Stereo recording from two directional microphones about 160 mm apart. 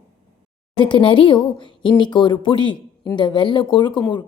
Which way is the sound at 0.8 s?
30° left (ahead or behind).